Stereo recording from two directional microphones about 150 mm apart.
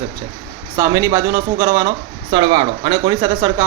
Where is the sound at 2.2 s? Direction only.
35° right (ahead or behind).